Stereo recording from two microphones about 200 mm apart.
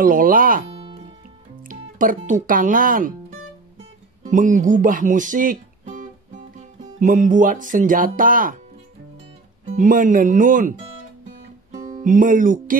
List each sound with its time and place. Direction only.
0.0 s speech: 45° right (ahead or behind)
0.7 s music: 25° right (ahead or behind)
2.0 s speech: 40° right (ahead or behind)
9.7 s speech: 40° right (ahead or behind)